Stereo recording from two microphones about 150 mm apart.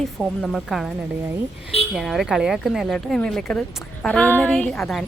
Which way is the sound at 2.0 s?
Centre (ahead or behind).